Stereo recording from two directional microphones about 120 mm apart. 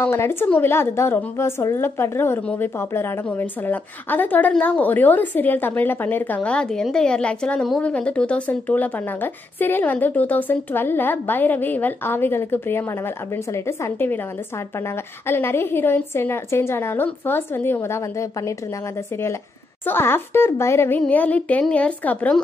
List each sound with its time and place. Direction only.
0.0 s a woman's voice: 20° left (ahead or behind)
15.2 s a woman's voice: 20° left (ahead or behind)
19.9 s a woman's voice: 20° left (ahead or behind)